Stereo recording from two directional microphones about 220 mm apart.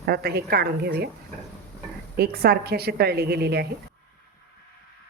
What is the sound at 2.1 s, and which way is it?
A woman's voice, 45° right (ahead or behind).